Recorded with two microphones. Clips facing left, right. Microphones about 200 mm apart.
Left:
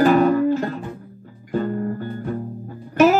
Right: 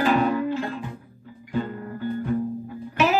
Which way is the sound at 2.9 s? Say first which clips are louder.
Left 7 dB; 45° left (ahead or behind).